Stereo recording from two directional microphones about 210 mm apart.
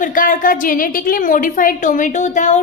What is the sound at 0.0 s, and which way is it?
A woman's voice, 40° left (ahead or behind).